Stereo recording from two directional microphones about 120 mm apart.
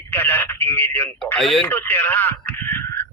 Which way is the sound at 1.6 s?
15° left (ahead or behind).